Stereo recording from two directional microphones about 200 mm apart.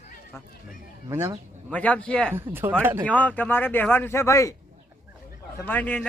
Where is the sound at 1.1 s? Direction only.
15° right (ahead or behind).